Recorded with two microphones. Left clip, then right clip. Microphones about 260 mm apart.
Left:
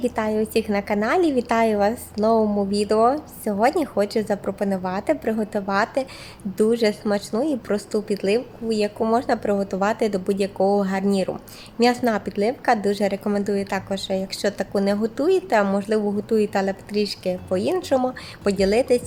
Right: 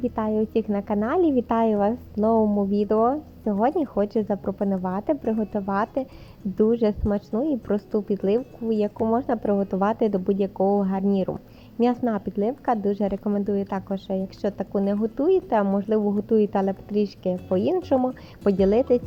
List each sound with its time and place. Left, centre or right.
0.0 s a woman's voice: centre
2.3 s speech: centre
2.7 s a woman's voice: centre
10.6 s speech: centre
10.8 s a woman's voice: centre